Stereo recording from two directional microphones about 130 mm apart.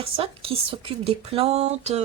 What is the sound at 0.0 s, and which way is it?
Speech, 45° right (ahead or behind).